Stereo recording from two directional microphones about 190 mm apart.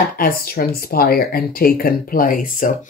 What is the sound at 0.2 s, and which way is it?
Speech, 50° left (ahead or behind).